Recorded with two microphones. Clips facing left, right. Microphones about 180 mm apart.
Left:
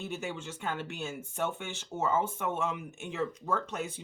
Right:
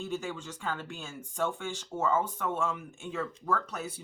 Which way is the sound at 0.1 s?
5° left (ahead or behind).